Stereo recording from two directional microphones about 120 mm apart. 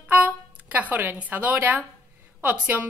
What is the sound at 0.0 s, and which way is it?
A woman's voice, 10° right (ahead or behind).